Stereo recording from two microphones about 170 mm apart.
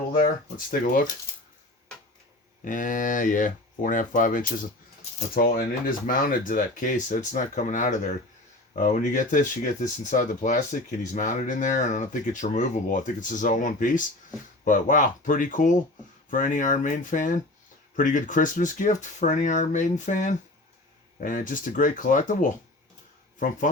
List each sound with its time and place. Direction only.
0.1 s speech: 55° left (ahead or behind)
2.6 s speech: 50° left (ahead or behind)